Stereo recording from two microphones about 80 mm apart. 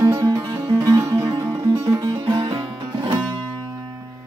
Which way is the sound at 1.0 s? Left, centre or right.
Right.